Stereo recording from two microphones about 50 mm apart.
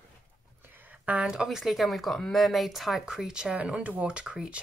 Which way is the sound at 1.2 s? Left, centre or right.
Centre.